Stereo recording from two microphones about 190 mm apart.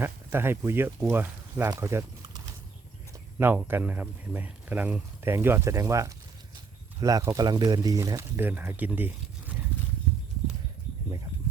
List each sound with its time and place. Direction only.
0.0 s speech: 10° right (ahead or behind)
3.3 s speech: 10° right (ahead or behind)